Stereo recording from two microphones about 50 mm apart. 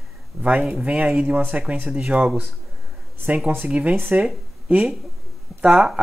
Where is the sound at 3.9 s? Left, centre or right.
Right.